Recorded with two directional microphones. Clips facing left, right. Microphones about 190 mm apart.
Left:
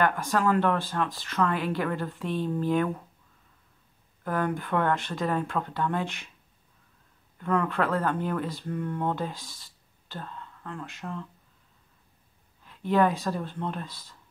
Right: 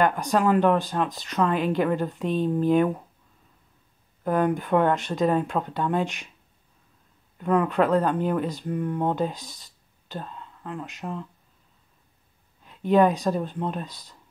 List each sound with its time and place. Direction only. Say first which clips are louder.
0.0 s speech: right 3 dB; 20° right (ahead or behind)
4.2 s speech: right 6 dB; 20° right (ahead or behind)
7.3 s speech: right 5 dB; 15° right (ahead or behind)
12.6 s speech: right 4 dB; 20° right (ahead or behind)